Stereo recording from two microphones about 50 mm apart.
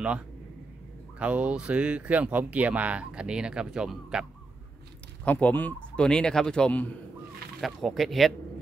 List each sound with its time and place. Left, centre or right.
1.2 s speech: right; by 4.3 s centre
5.2 s speech: left
5.5 s speech: left
5.8 s speech: centre
7.6 s speech: centre